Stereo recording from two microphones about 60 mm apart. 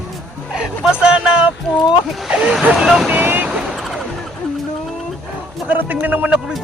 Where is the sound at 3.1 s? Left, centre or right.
Right.